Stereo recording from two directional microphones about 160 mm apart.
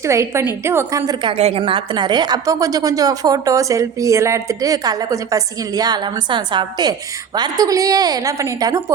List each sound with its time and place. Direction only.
0.0 s a woman's voice: 20° right (ahead or behind)
1.2 s a woman's voice: 35° right (ahead or behind); by 8.8 s 20° right (ahead or behind)